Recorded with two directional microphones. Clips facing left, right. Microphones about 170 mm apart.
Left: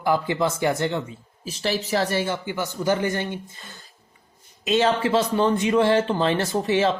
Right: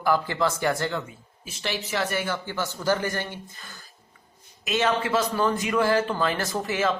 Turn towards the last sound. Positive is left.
turn(degrees=25)  # may be behind; listen again after turning